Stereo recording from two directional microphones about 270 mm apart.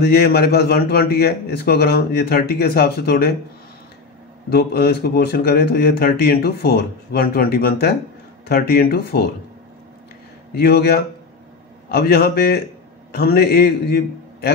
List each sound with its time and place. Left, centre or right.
0.0 s speech: left
4.5 s speech: left
10.5 s a man's voice: left